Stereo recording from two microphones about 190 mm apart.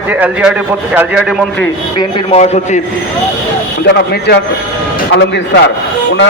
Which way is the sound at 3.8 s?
60° left (ahead or behind).